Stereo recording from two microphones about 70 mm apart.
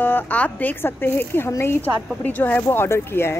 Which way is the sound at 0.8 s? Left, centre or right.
Left.